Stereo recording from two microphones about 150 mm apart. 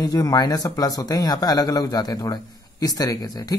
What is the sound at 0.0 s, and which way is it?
Speech, 25° left (ahead or behind).